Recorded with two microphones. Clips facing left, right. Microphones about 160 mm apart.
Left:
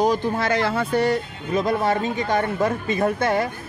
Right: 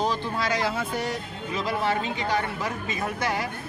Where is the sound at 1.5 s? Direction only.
50° left (ahead or behind).